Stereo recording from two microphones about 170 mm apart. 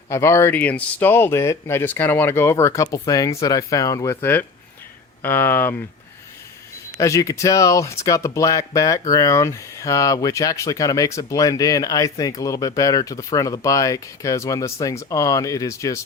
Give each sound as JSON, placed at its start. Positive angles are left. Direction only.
{"t": 0.1, "sound": "speech", "side_deg": 15}
{"t": 7.0, "sound": "speech", "side_deg": 20}